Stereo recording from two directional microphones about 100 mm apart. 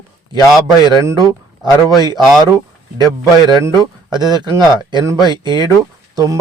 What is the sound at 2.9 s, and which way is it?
A man's voice, 45° right (ahead or behind).